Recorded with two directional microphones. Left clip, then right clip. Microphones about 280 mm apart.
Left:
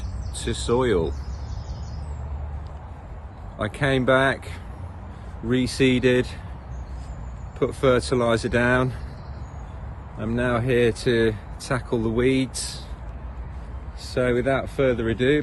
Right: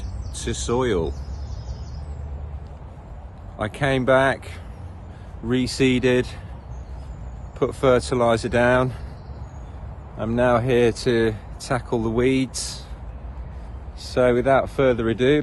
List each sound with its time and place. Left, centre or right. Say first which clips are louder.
0.3 s speech: left 1 dB; centre
3.6 s speech: right 1 dB; centre
7.6 s speech: right 2 dB; centre
10.2 s speech: right 5 dB; centre
14.0 s speech: right 4 dB; centre